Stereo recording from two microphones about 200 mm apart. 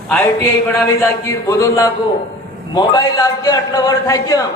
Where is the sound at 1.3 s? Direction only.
15° left (ahead or behind).